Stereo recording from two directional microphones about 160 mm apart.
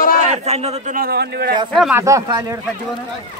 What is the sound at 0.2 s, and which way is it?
Speech, 45° right (ahead or behind).